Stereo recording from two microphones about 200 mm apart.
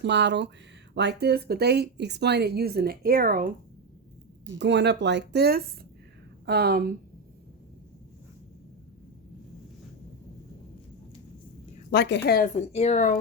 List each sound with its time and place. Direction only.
0.0 s speech: 60° right (ahead or behind); by 3.5 s 45° right (ahead or behind)
4.6 s speech: 60° right (ahead or behind)
11.9 s a woman's voice: 60° left (ahead or behind)
12.5 s speech: 30° left (ahead or behind)